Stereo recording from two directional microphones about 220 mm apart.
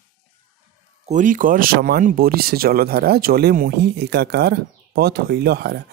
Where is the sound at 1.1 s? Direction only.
35° right (ahead or behind).